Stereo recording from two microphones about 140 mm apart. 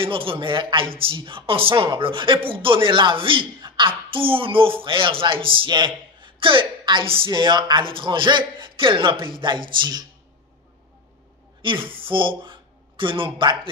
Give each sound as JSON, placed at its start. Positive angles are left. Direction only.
{"t": 0.0, "sound": "speech", "side_deg": -40}
{"t": 11.6, "sound": "speech", "side_deg": -40}